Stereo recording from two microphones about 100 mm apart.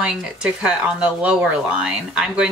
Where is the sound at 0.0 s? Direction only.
10° right (ahead or behind).